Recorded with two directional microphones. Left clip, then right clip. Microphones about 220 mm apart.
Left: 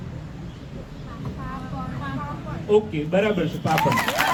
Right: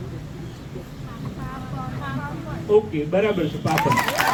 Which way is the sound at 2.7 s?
45° left (ahead or behind).